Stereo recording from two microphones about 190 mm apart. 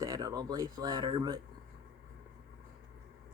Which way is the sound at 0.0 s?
20° right (ahead or behind).